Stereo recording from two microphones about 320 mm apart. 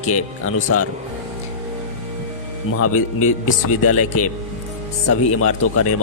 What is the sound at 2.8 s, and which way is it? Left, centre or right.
Speech, left.